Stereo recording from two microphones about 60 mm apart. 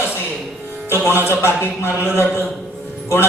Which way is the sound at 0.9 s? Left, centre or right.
Left.